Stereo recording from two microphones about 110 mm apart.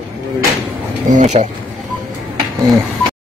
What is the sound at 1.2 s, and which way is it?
Speech, 90° right.